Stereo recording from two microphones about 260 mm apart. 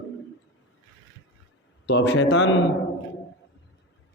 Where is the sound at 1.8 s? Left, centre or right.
Left.